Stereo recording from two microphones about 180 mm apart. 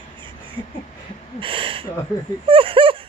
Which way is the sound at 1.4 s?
30° right (ahead or behind).